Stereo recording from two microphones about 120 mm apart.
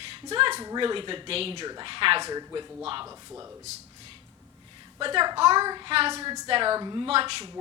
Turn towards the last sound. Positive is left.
turn(degrees=-50)  # may be behind; listen again after turning